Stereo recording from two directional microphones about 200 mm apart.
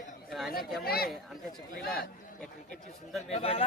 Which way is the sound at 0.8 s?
50° left (ahead or behind).